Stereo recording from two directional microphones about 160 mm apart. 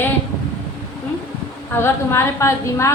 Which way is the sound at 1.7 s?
15° left (ahead or behind).